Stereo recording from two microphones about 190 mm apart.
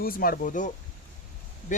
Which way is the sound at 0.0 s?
50° left (ahead or behind).